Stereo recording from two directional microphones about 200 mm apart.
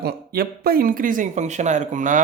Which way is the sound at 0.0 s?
50° right (ahead or behind).